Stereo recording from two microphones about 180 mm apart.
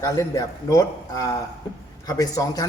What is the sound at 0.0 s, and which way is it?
A man's voice, 20° left (ahead or behind).